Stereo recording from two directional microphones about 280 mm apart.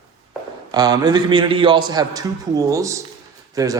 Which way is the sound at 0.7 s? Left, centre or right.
Centre.